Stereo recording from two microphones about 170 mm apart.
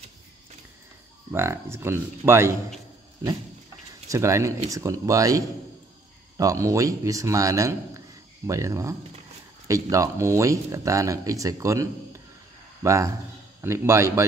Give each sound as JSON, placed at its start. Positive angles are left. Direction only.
{"t": 1.3, "sound": "speech", "side_deg": -15}
{"t": 4.1, "sound": "speech", "side_deg": -15}